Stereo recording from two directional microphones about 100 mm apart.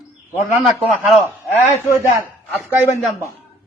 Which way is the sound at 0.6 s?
Centre (ahead or behind).